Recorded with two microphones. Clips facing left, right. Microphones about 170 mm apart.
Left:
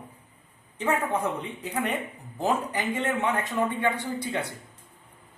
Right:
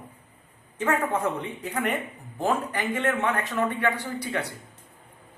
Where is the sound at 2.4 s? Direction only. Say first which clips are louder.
Right 1 dB; 15° left (ahead or behind).